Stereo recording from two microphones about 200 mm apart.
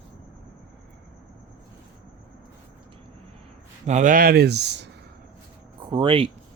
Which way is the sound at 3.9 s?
40° right (ahead or behind).